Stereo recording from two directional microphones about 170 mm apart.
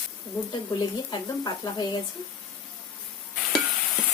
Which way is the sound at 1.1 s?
25° left (ahead or behind).